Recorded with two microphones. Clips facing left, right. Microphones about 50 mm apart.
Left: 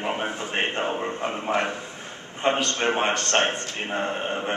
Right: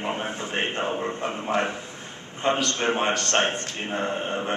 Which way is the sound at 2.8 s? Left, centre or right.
Centre.